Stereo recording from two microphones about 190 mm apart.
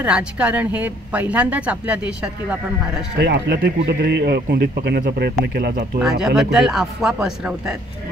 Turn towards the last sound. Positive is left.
turn(degrees=-5)  # may be behind; listen again after turning